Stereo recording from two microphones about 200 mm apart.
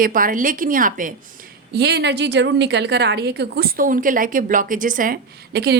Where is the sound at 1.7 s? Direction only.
55° right (ahead or behind).